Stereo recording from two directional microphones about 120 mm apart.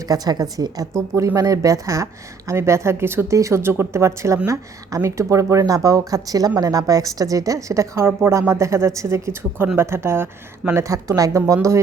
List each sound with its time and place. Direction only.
0.1 s a woman's voice: 35° right (ahead or behind)